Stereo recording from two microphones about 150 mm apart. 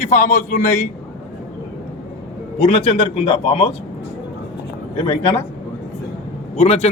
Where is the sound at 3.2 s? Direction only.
35° left (ahead or behind).